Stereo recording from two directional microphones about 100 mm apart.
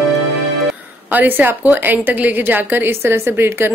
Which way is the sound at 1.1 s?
20° right (ahead or behind).